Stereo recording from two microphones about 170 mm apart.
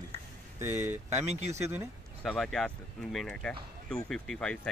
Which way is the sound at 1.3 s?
40° right (ahead or behind).